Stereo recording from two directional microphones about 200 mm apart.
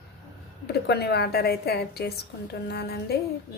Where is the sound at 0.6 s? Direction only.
55° left (ahead or behind).